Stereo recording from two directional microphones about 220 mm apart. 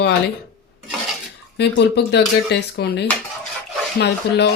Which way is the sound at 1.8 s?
50° left (ahead or behind).